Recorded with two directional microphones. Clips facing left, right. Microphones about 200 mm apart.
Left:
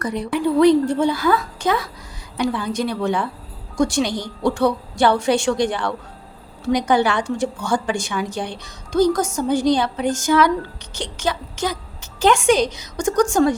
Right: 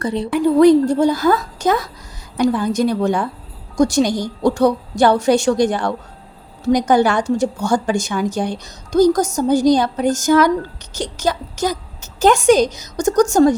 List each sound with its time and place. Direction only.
0.0 s speech: 30° right (ahead or behind)
0.3 s a woman's voice: 45° right (ahead or behind)